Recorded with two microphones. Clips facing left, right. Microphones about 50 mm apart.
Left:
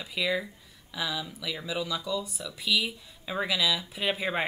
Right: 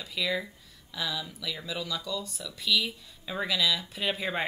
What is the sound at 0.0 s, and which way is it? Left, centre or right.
A woman's voice, centre.